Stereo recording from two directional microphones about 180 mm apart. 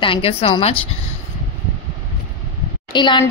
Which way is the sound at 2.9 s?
25° left (ahead or behind).